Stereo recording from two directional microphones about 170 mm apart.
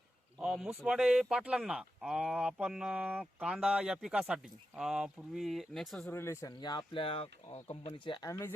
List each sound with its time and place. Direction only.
0.3 s speech: 5° right (ahead or behind)
6.1 s speech: 15° left (ahead or behind)
8.3 s speech: 15° left (ahead or behind)